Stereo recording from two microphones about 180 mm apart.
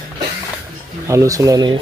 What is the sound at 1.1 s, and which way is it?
Speech, 15° right (ahead or behind).